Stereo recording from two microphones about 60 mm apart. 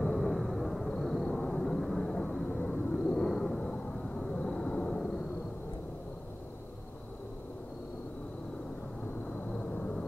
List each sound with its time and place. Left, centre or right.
0.0 s vehicle: centre
9.6 s vehicle: centre